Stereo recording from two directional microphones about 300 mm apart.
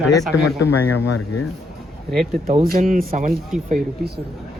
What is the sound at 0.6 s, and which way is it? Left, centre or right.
Speech, left.